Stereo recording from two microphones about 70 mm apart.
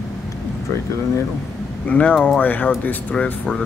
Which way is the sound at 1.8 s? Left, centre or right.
Centre.